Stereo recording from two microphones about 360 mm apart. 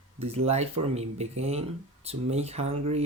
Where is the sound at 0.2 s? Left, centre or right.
Centre.